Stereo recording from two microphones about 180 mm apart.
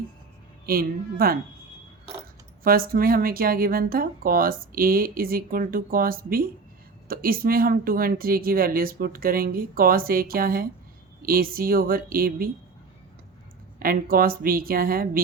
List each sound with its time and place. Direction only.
0.6 s speech: 55° right (ahead or behind)
2.6 s speech: 55° right (ahead or behind)
13.7 s speech: 55° right (ahead or behind)